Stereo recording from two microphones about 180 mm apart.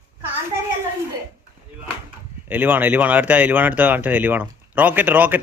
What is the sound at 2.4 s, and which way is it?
A man's voice, 10° right (ahead or behind).